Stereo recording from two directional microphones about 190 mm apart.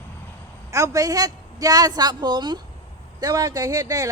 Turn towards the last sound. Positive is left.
turn(degrees=-15)  # may be behind; listen again after turning